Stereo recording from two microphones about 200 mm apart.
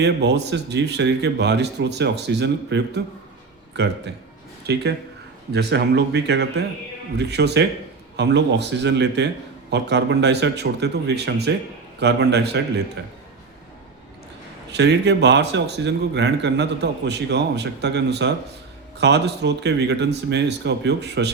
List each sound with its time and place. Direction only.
0.0 s a man's voice: 55° right (ahead or behind)
14.7 s a man's voice: 60° right (ahead or behind)